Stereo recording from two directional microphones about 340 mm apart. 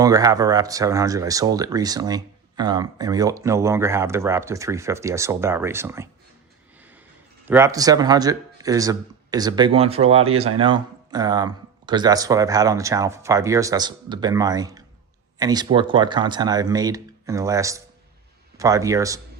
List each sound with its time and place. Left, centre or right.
0.0 s speech: centre
6.7 s snort: centre
7.4 s speech: centre